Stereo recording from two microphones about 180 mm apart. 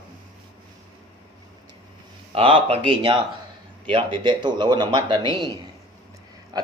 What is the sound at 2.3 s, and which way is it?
A man's voice, 30° right (ahead or behind).